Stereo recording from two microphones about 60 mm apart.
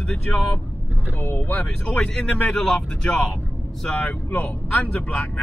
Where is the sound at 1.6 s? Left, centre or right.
Centre.